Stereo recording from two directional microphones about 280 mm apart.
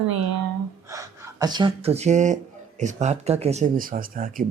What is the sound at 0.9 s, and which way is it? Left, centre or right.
Speech, centre.